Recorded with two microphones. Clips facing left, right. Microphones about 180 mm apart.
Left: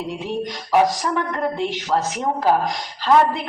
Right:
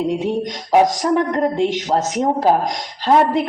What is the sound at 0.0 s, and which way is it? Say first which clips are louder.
A woman's voice: right 6 dB; 45° right (ahead or behind).